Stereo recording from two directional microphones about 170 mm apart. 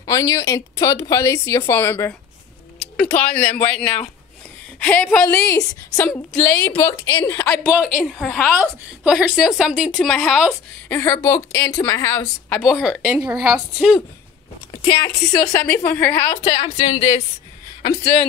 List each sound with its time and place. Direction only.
0.0 s speech: 20° left (ahead or behind)
3.2 s a woman's voice: 10° left (ahead or behind)
7.5 s a woman's voice: 5° left (ahead or behind)
8.5 s a woman's voice: 5° right (ahead or behind)
9.9 s a woman's voice: 5° left (ahead or behind)
10.9 s a woman's voice: 15° left (ahead or behind)
12.6 s a woman's voice: 5° right (ahead or behind)
15.4 s a woman's voice: 15° left (ahead or behind)
16.5 s speech: 25° left (ahead or behind)